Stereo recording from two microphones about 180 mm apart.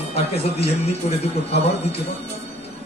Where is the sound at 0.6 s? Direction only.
35° left (ahead or behind).